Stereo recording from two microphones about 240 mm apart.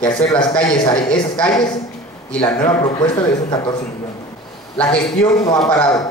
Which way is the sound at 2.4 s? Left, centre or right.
Centre.